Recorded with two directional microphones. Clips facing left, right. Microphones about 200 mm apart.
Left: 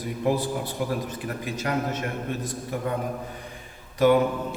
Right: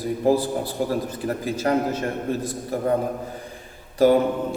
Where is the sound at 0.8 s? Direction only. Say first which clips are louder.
Right 5 dB; 35° right (ahead or behind).